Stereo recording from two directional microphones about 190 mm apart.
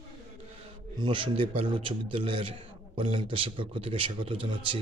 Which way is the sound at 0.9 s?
25° right (ahead or behind).